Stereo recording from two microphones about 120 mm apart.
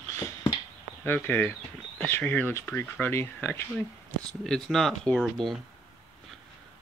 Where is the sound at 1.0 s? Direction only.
15° left (ahead or behind).